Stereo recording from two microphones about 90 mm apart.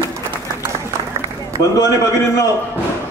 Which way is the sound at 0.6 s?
35° right (ahead or behind).